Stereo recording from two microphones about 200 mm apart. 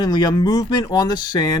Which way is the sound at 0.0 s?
20° left (ahead or behind).